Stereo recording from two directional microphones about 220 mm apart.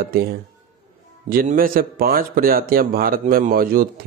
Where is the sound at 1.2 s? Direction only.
40° right (ahead or behind).